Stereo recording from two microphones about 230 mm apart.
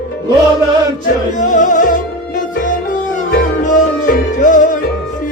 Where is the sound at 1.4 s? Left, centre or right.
Left.